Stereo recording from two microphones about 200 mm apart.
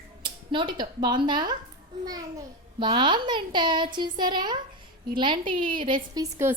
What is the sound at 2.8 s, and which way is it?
A woman's voice, 25° right (ahead or behind).